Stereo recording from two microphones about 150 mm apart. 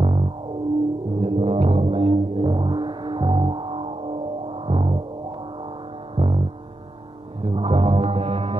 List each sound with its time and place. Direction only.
0.0 s music: 35° right (ahead or behind)
6.1 s music: 35° right (ahead or behind)
7.4 s music: 40° right (ahead or behind)